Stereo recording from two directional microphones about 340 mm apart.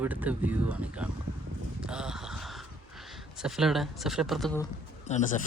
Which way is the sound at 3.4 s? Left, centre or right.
Centre.